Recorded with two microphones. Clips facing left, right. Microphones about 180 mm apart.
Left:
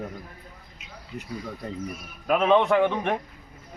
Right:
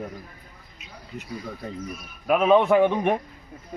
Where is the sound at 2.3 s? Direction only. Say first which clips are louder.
Right 2 dB; 10° right (ahead or behind).